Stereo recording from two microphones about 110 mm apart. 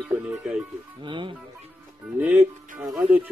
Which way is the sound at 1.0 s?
45° right (ahead or behind).